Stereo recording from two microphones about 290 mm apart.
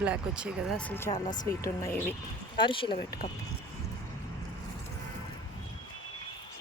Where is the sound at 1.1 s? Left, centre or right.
Centre.